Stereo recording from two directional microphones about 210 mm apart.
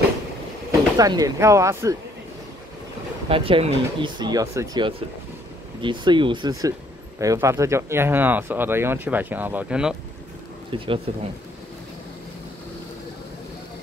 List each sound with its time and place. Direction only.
0.7 s speech: 15° right (ahead or behind)
3.3 s speech: 25° right (ahead or behind); by 9.9 s 5° right (ahead or behind)
10.7 s speech: 25° right (ahead or behind)